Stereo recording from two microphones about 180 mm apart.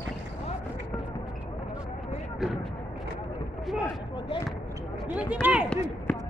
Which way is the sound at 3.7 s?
Centre (ahead or behind).